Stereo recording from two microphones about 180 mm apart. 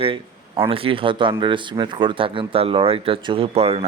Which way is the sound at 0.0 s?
30° right (ahead or behind).